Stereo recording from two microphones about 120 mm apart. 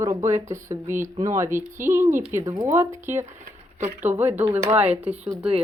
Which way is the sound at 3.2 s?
75° right (ahead or behind).